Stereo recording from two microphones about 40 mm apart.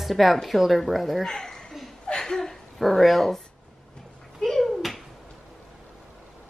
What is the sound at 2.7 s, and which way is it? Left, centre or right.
Speech, centre.